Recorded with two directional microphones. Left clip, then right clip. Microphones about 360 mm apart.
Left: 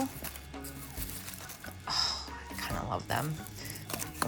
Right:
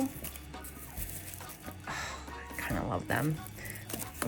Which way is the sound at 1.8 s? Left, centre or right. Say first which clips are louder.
Left 7 dB; centre.